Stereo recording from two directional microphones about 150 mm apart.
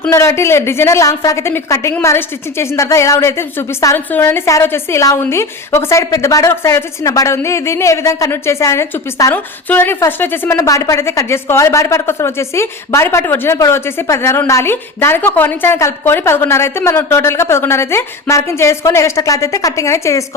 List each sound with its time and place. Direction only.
0.1 s a woman's voice: 20° left (ahead or behind)